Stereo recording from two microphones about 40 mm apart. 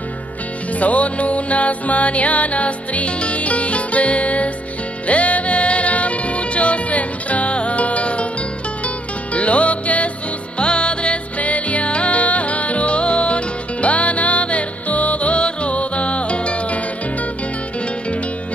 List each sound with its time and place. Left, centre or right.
0.7 s music: left
11.3 s music: left